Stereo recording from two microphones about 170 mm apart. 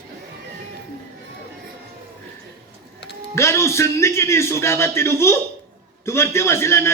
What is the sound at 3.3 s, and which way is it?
A man's voice, 15° left (ahead or behind).